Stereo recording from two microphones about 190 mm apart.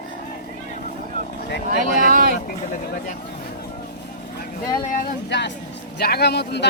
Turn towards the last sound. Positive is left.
turn(degrees=60)  # may be behind; listen again after turning